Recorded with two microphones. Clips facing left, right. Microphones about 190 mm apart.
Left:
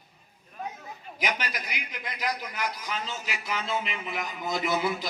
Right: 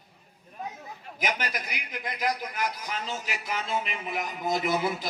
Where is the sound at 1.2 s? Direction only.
45° right (ahead or behind).